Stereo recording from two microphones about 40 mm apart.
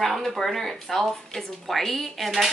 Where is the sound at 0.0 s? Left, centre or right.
Centre.